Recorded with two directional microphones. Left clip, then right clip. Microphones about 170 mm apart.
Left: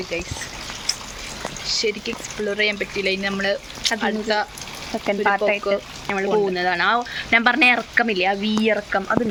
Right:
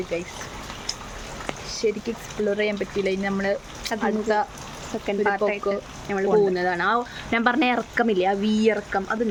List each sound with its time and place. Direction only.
1.6 s speech: 15° right (ahead or behind)
5.0 s speech: 15° left (ahead or behind)
5.7 s speech: 25° right (ahead or behind)
6.1 s speech: centre (ahead or behind)
8.7 s speech: 15° left (ahead or behind)